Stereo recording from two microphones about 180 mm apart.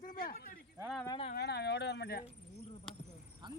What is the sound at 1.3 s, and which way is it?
Speech, 65° left (ahead or behind).